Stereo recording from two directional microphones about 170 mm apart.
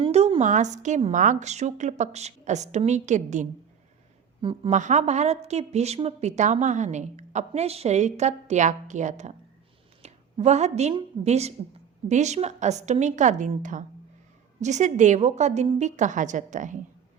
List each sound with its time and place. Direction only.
0.0 s a woman's voice: 35° right (ahead or behind)
4.4 s a woman's voice: 30° right (ahead or behind)
4.7 s a woman's voice: 45° right (ahead or behind)
10.0 s a sound: 40° right (ahead or behind)
10.9 s a woman's voice: 40° right (ahead or behind)